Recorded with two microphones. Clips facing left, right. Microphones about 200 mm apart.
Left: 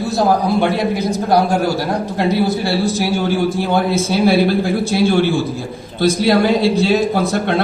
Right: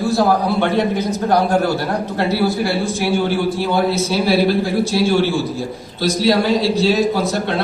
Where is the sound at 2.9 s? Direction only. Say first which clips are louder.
Left 1 dB; 40° left (ahead or behind).